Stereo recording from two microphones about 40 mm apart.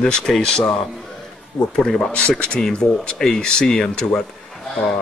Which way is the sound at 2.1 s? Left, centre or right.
Left.